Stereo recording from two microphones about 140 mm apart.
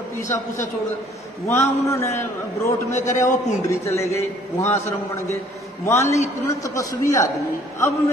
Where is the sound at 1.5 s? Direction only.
20° left (ahead or behind).